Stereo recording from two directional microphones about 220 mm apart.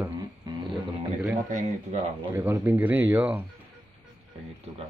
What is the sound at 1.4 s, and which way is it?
Speech, 30° right (ahead or behind).